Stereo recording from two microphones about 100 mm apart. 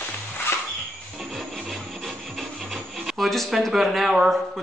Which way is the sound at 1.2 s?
Centre (ahead or behind).